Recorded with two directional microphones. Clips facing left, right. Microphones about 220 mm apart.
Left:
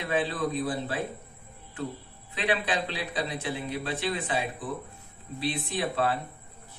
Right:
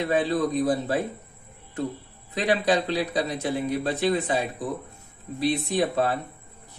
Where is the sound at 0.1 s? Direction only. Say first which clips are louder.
Right 3 dB; 40° right (ahead or behind).